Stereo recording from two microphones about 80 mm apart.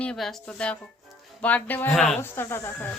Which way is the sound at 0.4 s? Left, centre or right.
Centre.